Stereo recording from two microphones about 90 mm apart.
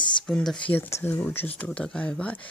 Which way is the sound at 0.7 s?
25° left (ahead or behind).